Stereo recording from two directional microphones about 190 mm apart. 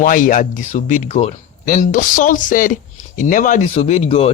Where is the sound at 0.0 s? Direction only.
45° left (ahead or behind).